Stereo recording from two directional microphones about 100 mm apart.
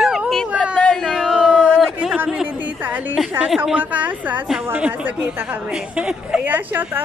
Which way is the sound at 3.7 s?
15° right (ahead or behind).